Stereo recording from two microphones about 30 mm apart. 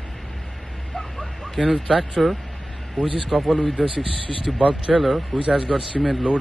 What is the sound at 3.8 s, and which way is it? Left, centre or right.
Speech, right.